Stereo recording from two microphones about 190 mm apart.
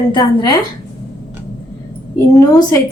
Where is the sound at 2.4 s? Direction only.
20° left (ahead or behind).